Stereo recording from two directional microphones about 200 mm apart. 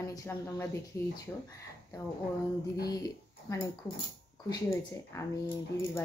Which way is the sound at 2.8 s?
20° left (ahead or behind).